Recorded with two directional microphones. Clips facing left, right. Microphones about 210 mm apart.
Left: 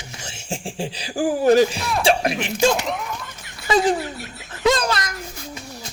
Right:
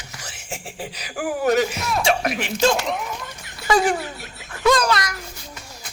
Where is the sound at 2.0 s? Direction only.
30° left (ahead or behind).